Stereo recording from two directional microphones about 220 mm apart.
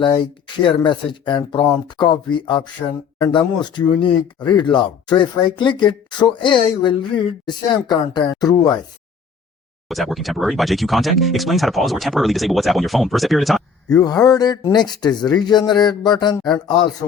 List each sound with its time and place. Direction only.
0.0 s speech: 20° left (ahead or behind)
9.9 s speech: centre (ahead or behind)
13.9 s speech: 15° left (ahead or behind)